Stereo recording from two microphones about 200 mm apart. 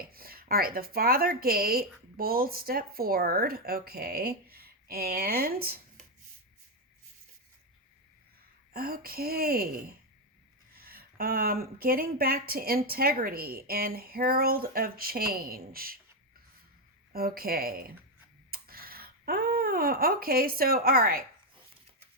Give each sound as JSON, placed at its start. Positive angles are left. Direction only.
{"t": 0.0, "sound": "speech", "side_deg": -50}
{"t": 8.7, "sound": "speech", "side_deg": -50}
{"t": 17.1, "sound": "speech", "side_deg": -50}